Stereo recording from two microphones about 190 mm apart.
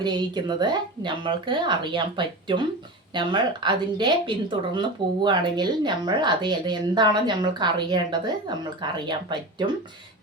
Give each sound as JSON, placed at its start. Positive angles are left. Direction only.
{"t": 0.0, "sound": "speech", "side_deg": -25}